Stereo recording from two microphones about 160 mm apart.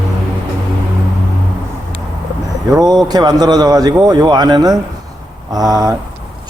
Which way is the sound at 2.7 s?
25° right (ahead or behind).